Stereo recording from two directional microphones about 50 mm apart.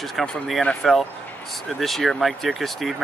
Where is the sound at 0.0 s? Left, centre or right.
Centre.